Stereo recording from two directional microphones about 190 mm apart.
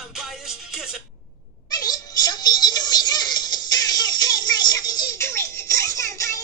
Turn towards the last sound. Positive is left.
turn(degrees=15)  # may be behind; listen again after turning